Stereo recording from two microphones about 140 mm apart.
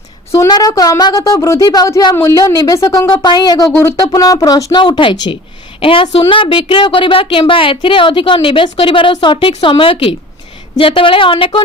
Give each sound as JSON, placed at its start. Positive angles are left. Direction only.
{"t": 0.3, "sound": "a woman's voice", "side_deg": 30}
{"t": 3.1, "sound": "a woman's voice", "side_deg": 30}